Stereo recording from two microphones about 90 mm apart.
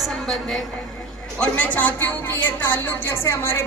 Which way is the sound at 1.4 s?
15° left (ahead or behind).